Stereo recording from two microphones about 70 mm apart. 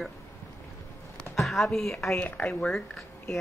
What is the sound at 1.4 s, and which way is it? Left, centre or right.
Speech, centre.